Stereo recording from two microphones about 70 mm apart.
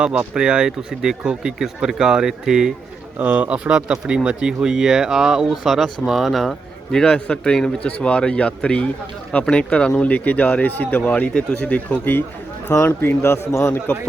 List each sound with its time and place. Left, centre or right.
0.0 s speech: centre
3.2 s speech: right; by 14.1 s left